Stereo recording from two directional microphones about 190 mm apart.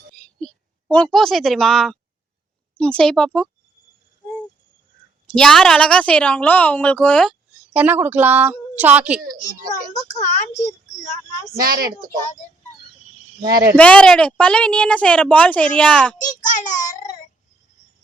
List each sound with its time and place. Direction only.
0.2 s a sound: 5° left (ahead or behind)
2.7 s speech: 5° left (ahead or behind)
5.2 s speech: 5° left (ahead or behind)
7.7 s a woman's voice: 10° right (ahead or behind)
9.9 s speech: 40° left (ahead or behind)
11.6 s speech: 50° right (ahead or behind)
13.7 s speech: 5° left (ahead or behind)
16.4 s child singing: 40° left (ahead or behind)